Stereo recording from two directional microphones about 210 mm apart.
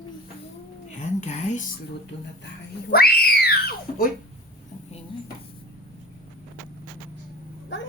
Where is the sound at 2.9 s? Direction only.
45° left (ahead or behind).